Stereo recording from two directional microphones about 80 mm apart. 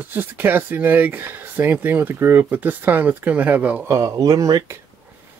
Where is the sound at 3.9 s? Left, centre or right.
Right.